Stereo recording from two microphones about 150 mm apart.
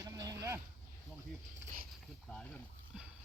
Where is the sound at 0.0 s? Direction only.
25° right (ahead or behind).